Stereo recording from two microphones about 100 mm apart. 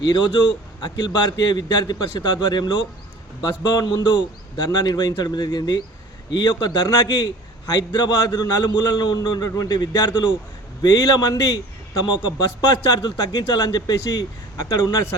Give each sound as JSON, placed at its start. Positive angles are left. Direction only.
{"t": 0.0, "sound": "a man's voice", "side_deg": 50}